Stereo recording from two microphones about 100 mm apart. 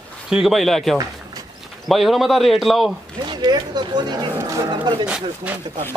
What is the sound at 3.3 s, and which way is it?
Speech, 45° right (ahead or behind).